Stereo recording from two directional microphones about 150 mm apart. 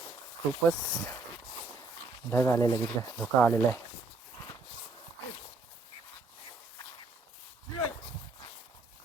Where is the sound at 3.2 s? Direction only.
10° left (ahead or behind).